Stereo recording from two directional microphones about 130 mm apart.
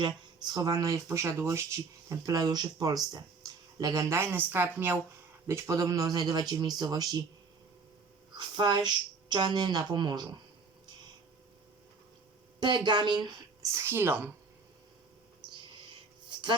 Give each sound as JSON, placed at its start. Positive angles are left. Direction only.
{"t": 0.0, "sound": "speech", "side_deg": -30}
{"t": 4.1, "sound": "a woman's voice", "side_deg": -15}
{"t": 8.4, "sound": "a woman's voice", "side_deg": -35}
{"t": 12.5, "sound": "a woman's voice", "side_deg": -35}
{"t": 13.7, "sound": "speech", "side_deg": -20}